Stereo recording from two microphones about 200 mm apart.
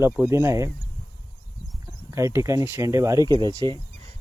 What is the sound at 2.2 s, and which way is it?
Speech, 15° right (ahead or behind).